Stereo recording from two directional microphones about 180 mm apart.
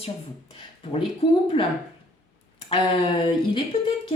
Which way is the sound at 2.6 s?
30° left (ahead or behind).